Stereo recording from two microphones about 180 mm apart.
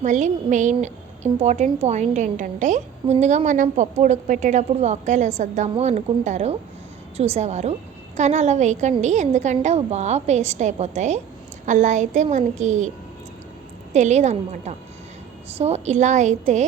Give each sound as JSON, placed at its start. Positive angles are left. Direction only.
{"t": 0.0, "sound": "a woman's voice", "side_deg": -45}
{"t": 13.9, "sound": "a woman's voice", "side_deg": -40}